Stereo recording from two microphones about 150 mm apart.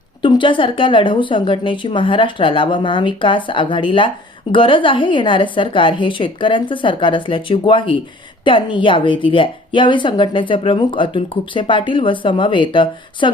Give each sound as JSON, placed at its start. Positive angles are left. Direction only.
{"t": 0.2, "sound": "a woman's voice", "side_deg": 35}